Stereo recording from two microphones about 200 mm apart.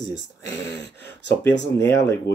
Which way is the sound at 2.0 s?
15° left (ahead or behind).